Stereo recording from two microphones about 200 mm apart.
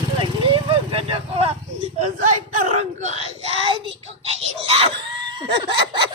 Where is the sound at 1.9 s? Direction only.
40° right (ahead or behind).